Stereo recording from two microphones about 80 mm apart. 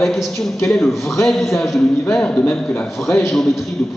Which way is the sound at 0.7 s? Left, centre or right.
Centre.